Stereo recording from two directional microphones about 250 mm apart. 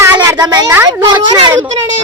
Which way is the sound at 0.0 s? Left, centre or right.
Centre.